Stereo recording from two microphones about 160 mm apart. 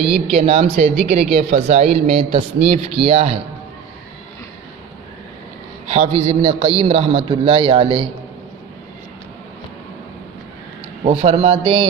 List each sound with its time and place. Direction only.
0.1 s speech: 40° right (ahead or behind)
5.9 s speech: 40° right (ahead or behind)
11.0 s speech: 35° right (ahead or behind)